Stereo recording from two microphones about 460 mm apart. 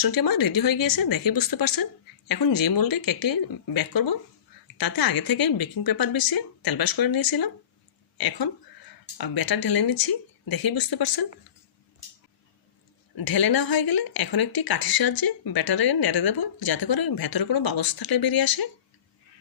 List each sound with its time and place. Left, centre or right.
0.0 s speech: left
9.1 s speech: left
13.1 s speech: left